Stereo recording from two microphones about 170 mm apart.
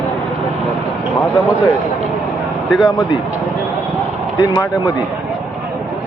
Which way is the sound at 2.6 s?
Centre (ahead or behind).